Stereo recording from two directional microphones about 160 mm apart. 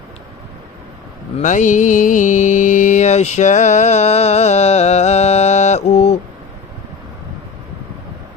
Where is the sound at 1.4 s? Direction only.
50° left (ahead or behind).